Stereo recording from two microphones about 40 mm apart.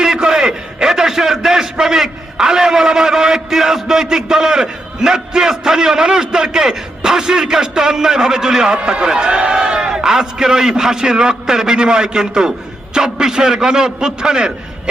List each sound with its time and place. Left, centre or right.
0.0 s a man's voice: centre